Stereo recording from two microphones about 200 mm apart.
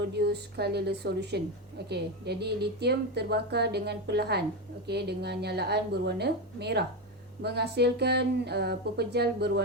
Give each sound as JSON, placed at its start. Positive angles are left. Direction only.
{"t": 0.0, "sound": "speech", "side_deg": -55}